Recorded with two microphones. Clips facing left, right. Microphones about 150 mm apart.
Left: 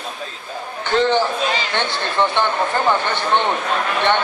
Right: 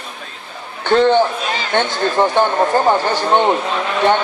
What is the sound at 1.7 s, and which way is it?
Speech, 45° right (ahead or behind).